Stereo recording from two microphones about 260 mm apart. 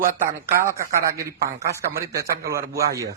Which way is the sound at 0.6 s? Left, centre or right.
Centre.